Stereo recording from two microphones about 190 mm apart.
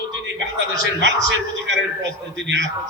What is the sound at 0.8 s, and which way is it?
A man's voice, 70° right (ahead or behind).